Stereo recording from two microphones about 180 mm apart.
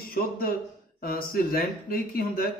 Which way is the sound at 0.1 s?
55° left (ahead or behind).